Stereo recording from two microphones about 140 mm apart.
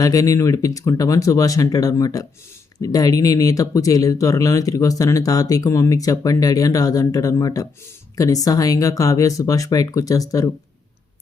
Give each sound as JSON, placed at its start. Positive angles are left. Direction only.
{"t": 0.0, "sound": "speech", "side_deg": 25}